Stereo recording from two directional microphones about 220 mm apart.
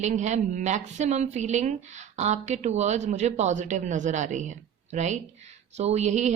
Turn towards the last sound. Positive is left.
turn(degrees=-30)  # may be behind; listen again after turning